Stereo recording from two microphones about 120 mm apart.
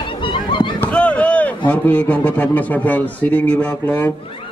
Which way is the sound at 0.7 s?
10° left (ahead or behind).